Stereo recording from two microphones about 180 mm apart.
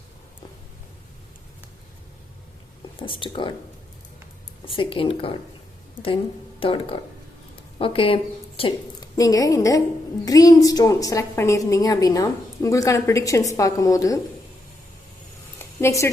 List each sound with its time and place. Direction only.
3.0 s a woman's voice: 30° left (ahead or behind)
4.6 s a woman's voice: 30° left (ahead or behind)
6.6 s a woman's voice: 30° left (ahead or behind)
9.0 s a woman's voice: 20° left (ahead or behind)
15.8 s a woman's voice: 15° left (ahead or behind)